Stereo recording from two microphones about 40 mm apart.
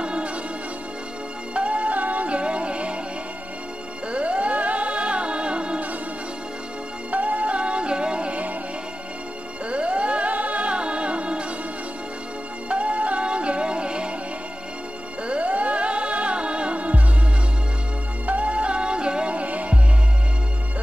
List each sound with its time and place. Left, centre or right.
0.0 s music: right
1.5 s music: right
4.1 s music: right
7.1 s music: right
9.7 s music: right
12.6 s music: right
15.2 s music: right
18.2 s music: right